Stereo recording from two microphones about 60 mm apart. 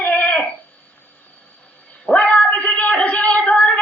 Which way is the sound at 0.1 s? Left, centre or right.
Centre.